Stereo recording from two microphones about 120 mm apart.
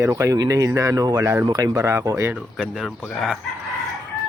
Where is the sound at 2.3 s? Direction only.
5° right (ahead or behind).